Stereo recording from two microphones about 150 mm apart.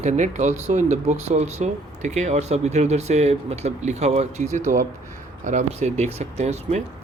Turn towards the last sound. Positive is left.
turn(degrees=-45)  # may be behind; listen again after turning